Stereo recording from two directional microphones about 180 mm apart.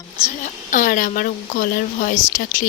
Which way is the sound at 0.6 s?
45° left (ahead or behind).